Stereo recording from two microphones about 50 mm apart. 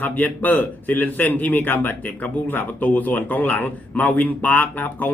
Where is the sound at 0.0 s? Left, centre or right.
Left.